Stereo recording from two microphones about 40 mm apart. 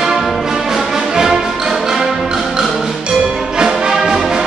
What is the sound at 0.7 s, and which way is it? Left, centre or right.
Music, centre.